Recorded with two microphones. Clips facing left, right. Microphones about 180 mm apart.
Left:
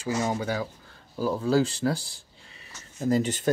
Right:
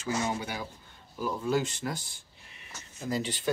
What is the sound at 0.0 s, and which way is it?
Speech, 40° left (ahead or behind).